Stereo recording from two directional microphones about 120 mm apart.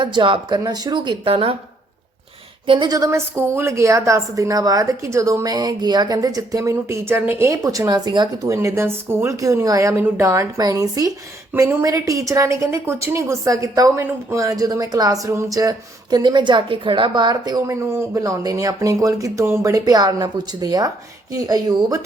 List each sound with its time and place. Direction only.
0.0 s speech: 40° right (ahead or behind)
2.6 s speech: 40° right (ahead or behind)
8.5 s speech: 25° right (ahead or behind)